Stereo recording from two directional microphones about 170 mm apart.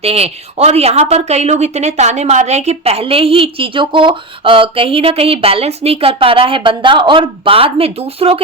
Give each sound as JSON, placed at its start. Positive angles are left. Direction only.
{"t": 0.0, "sound": "speech", "side_deg": -35}